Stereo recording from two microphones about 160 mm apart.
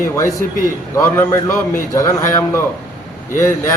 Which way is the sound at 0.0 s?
20° left (ahead or behind).